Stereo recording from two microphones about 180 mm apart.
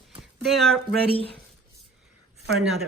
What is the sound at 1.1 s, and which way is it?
Speech, 30° left (ahead or behind).